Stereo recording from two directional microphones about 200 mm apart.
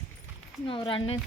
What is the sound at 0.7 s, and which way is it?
Speech, 25° left (ahead or behind).